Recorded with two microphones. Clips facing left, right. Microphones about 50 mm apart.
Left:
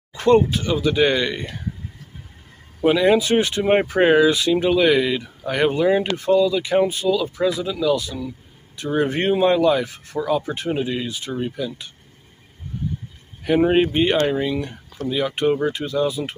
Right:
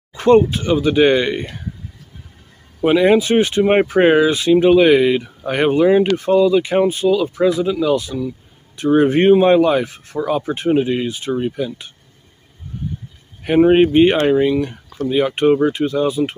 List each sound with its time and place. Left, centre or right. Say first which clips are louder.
0.1 s speech: right 4 dB; centre
2.8 s speech: right 3 dB; right
6.3 s speech: right 3 dB; right
11.5 s speech: right 4 dB; right
13.6 s speech: right 7 dB; centre